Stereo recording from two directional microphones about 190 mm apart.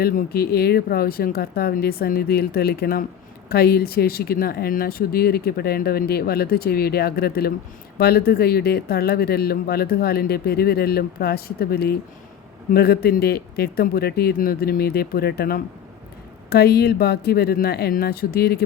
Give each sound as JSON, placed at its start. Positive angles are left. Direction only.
{"t": 0.0, "sound": "speech", "side_deg": 55}